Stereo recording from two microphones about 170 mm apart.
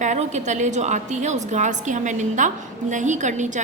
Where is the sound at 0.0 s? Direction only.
45° right (ahead or behind).